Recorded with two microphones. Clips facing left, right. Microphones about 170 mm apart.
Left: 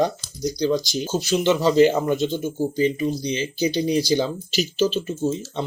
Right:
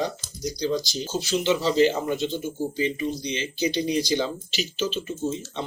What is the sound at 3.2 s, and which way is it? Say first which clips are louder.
Speech: left 4 dB; 35° left (ahead or behind).